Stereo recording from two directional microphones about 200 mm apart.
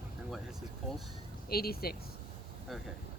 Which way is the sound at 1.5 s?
50° left (ahead or behind).